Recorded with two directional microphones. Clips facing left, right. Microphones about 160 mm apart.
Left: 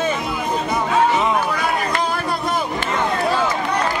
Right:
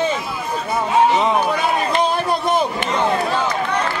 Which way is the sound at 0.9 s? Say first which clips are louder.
Right 3 dB; 20° right (ahead or behind).